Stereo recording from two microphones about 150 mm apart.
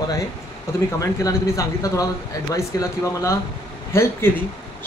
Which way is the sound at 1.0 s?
20° left (ahead or behind).